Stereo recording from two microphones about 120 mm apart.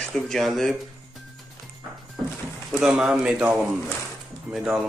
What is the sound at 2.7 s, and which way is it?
Speech, 5° right (ahead or behind).